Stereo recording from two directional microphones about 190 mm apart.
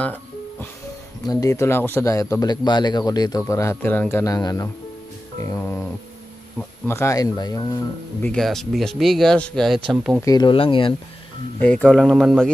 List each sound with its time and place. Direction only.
0.0 s music: 10° left (ahead or behind)
1.2 s speech: 20° left (ahead or behind)
8.2 s speech: 5° left (ahead or behind)
10.2 s speech: 20° left (ahead or behind)
11.6 s speech: 5° left (ahead or behind)